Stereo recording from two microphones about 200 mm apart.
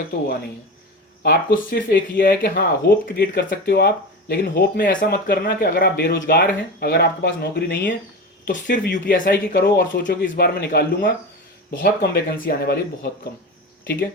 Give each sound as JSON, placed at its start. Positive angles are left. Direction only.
{"t": 1.2, "sound": "speech", "side_deg": 50}
{"t": 3.1, "sound": "speech", "side_deg": 60}
{"t": 8.4, "sound": "speech", "side_deg": 40}